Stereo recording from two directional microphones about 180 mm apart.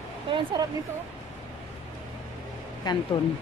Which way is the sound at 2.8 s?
25° left (ahead or behind).